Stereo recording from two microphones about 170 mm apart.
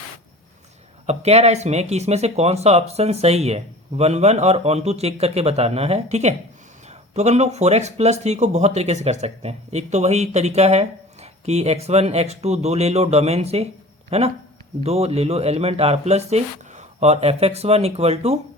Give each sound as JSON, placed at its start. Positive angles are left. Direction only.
{"t": 1.0, "sound": "speech", "side_deg": -40}